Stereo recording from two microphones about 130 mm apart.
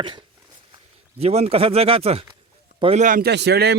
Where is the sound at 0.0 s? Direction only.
35° right (ahead or behind).